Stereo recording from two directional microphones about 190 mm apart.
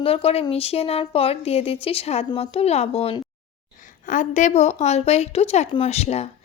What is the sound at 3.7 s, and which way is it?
Speech, 45° left (ahead or behind).